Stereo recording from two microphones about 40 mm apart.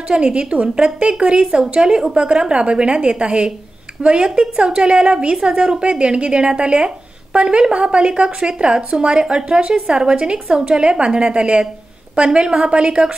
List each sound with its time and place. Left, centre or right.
0.1 s a woman's voice: right